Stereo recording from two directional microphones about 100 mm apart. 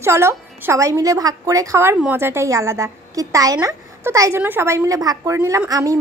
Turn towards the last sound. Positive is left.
turn(degrees=-35)  # may be behind; listen again after turning